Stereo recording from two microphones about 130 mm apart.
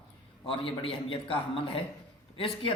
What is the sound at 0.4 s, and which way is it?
A man's voice, 45° left (ahead or behind).